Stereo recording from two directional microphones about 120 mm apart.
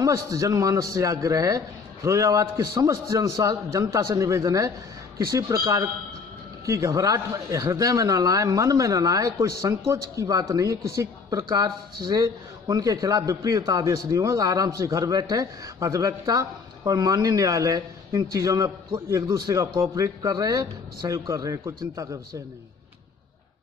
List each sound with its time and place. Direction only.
0.0 s a man's voice: 30° right (ahead or behind)